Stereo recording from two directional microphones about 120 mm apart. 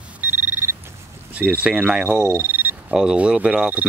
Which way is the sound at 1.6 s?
10° right (ahead or behind).